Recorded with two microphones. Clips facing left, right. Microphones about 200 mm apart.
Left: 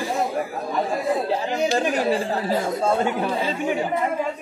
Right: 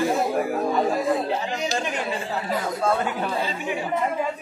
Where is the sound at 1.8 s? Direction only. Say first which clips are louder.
Left 6 dB; 35° left (ahead or behind).